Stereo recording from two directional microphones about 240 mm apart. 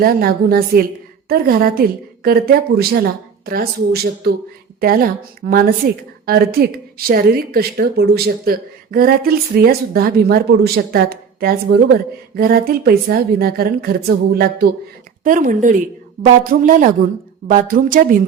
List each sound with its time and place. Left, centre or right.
0.0 s a woman's voice: right
15.2 s a woman's voice: right